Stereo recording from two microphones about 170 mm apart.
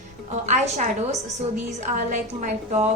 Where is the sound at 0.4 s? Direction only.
45° right (ahead or behind).